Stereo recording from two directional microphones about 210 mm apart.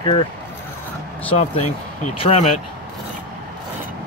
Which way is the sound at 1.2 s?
30° left (ahead or behind).